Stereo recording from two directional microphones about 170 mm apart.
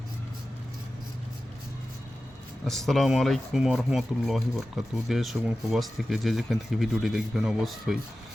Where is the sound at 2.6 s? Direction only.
Centre (ahead or behind).